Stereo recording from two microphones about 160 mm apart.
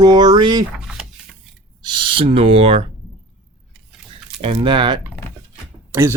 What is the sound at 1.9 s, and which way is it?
Speech, 35° right (ahead or behind).